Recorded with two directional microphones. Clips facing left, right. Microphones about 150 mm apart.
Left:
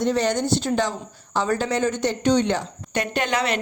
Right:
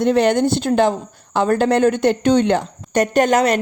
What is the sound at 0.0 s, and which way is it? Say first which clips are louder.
A woman's voice: right 7 dB; 60° right (ahead or behind).